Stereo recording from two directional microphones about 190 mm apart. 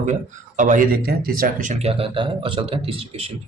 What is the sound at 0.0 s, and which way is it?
Speech, 40° right (ahead or behind).